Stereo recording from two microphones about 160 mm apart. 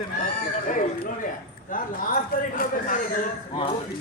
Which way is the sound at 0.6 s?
60° left (ahead or behind).